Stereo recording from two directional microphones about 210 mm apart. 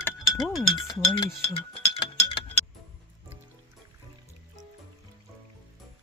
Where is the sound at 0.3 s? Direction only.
Centre (ahead or behind).